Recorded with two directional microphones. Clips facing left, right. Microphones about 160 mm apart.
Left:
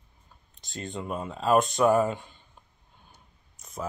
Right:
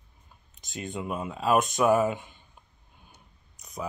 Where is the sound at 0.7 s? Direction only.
15° right (ahead or behind).